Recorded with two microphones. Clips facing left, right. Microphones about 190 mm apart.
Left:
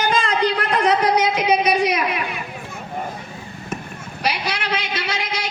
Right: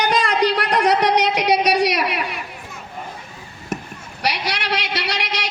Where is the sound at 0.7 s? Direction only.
70° right (ahead or behind).